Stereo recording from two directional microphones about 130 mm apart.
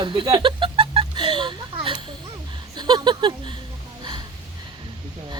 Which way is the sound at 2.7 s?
35° right (ahead or behind).